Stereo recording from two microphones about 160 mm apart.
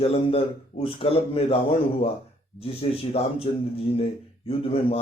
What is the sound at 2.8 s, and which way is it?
Speech, 35° left (ahead or behind).